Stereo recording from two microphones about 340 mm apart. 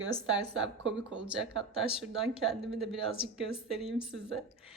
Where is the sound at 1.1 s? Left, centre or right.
Centre.